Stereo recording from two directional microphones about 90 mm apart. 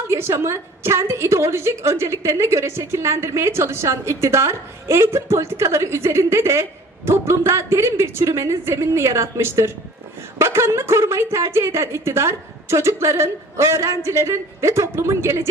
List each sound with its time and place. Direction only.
0.1 s a woman's voice: 30° right (ahead or behind)